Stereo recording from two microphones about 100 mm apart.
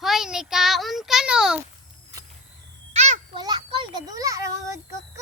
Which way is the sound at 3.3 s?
50° right (ahead or behind).